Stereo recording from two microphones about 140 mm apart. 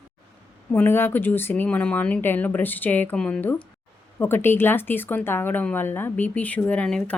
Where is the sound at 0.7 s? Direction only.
15° left (ahead or behind).